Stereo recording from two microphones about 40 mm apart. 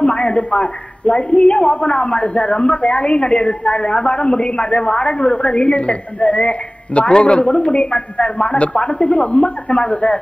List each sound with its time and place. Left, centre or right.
0.0 s a man's voice: left